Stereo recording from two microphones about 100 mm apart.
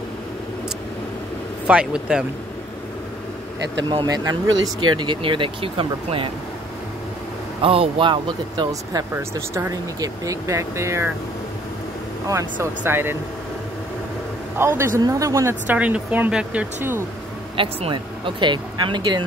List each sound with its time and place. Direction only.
1.7 s speech: 10° right (ahead or behind)
4.0 s speech: 40° right (ahead or behind)
4.7 s speech: 55° right (ahead or behind)
7.6 s speech: 65° right (ahead or behind); by 9.0 s 50° right (ahead or behind)
9.1 s speech: 25° right (ahead or behind)
12.5 s speech: 20° right (ahead or behind)
14.6 s speech: 25° right (ahead or behind)
15.6 s speech: 15° right (ahead or behind)
17.6 s speech: 65° right (ahead or behind)